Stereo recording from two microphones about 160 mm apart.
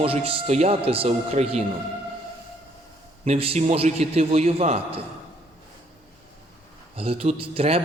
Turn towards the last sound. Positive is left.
turn(degrees=-35)  # may be behind; listen again after turning